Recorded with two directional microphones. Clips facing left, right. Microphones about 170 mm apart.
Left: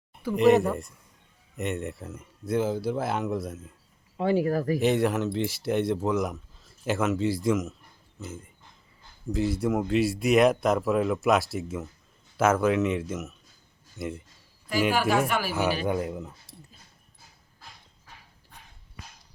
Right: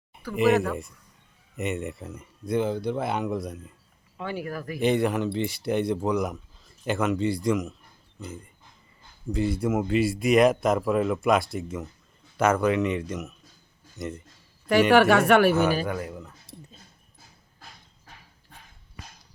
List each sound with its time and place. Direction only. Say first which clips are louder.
0.3 s speech: left 2 dB; centre (ahead or behind)
4.2 s speech: left 8 dB; 30° left (ahead or behind)
4.8 s speech: right 5 dB; centre (ahead or behind)
14.7 s speech: right 6 dB; 70° right (ahead or behind)
15.9 s speech: left 3 dB; 20° left (ahead or behind)